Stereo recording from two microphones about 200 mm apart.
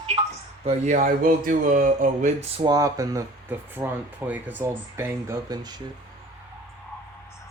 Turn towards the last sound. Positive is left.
turn(degrees=-20)  # may be behind; listen again after turning